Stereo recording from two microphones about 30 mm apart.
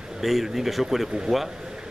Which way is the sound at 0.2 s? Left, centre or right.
Centre.